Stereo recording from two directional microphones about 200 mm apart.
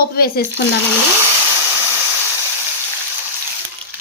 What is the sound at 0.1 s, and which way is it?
Speech, 50° left (ahead or behind).